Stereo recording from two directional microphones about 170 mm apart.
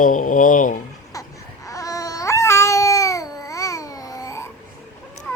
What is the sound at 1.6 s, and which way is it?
Babbling, 20° left (ahead or behind).